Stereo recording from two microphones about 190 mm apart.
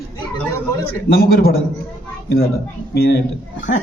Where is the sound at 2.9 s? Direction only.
55° left (ahead or behind).